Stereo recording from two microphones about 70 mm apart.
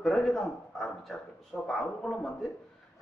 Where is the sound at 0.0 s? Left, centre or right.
Centre.